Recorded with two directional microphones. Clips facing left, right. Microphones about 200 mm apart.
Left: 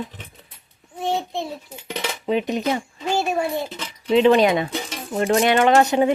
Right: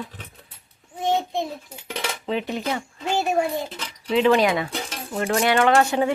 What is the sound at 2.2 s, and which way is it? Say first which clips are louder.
Cutlery: left 5 dB; 15° left (ahead or behind).